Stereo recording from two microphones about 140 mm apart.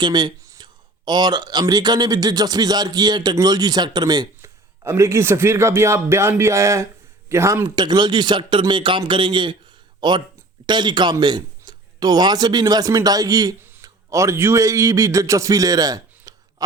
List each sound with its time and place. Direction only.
0.0 s speech: 30° right (ahead or behind)
4.4 s a man's voice: 20° right (ahead or behind)